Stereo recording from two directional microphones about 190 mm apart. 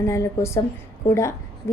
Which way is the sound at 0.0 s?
15° left (ahead or behind).